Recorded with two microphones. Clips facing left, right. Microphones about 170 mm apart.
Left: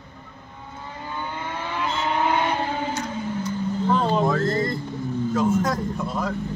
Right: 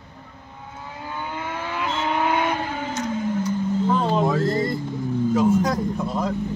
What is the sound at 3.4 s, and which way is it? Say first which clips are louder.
Vehicle: right 3 dB; 5° right (ahead or behind).